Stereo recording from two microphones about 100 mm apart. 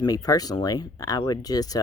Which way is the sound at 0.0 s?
40° left (ahead or behind).